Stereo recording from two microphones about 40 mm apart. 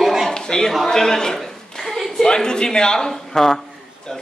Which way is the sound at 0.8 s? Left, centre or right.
Centre.